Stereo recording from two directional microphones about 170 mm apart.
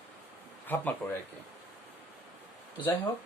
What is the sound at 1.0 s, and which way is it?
Speech, 10° left (ahead or behind).